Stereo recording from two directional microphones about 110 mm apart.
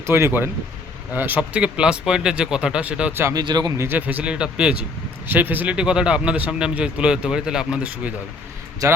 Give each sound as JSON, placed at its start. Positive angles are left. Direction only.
{"t": 0.0, "sound": "speech", "side_deg": -25}
{"t": 3.3, "sound": "speech", "side_deg": -40}
{"t": 3.8, "sound": "speech", "side_deg": -20}